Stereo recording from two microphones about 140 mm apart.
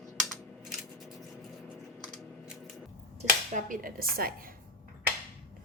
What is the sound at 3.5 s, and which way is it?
Speech, 75° right (ahead or behind).